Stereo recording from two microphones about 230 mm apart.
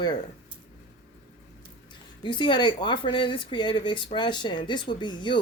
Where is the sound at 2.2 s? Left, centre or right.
Centre.